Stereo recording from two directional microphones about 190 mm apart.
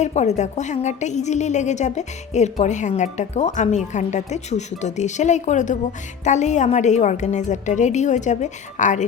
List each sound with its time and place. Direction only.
0.0 s a woman's voice: 35° left (ahead or behind)